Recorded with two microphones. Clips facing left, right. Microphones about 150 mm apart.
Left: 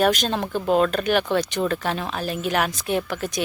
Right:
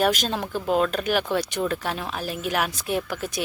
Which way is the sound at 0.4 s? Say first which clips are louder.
Left 3 dB; 20° left (ahead or behind).